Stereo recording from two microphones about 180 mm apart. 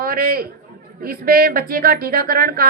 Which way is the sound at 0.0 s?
55° right (ahead or behind).